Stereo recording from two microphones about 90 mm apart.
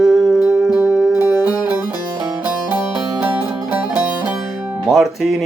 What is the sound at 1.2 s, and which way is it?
Music, 45° left (ahead or behind).